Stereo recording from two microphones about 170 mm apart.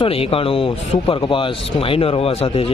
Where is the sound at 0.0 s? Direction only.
35° left (ahead or behind).